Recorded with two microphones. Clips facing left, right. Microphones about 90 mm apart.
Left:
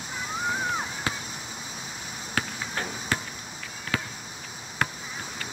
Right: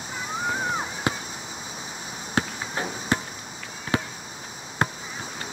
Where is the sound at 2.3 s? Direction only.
25° right (ahead or behind).